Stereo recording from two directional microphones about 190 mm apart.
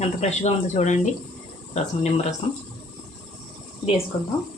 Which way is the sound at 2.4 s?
35° left (ahead or behind).